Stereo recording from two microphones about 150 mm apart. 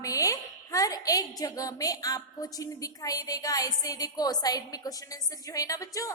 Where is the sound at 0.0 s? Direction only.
20° left (ahead or behind).